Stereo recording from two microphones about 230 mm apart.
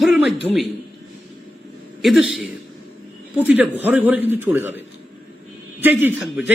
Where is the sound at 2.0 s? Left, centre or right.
Centre.